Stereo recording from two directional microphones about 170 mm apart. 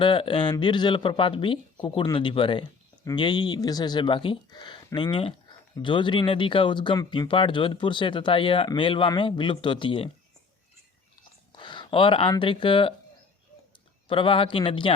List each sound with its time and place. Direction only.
0.0 s speech: 30° left (ahead or behind)
11.5 s a sound: 30° left (ahead or behind)
12.3 s speech: 30° left (ahead or behind)
14.1 s a man's voice: 30° left (ahead or behind)